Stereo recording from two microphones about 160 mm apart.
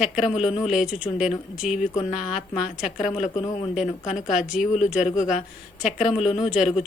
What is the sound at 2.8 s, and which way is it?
Speech, 50° left (ahead or behind).